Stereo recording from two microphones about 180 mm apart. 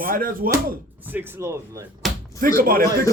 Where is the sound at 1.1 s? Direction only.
15° right (ahead or behind).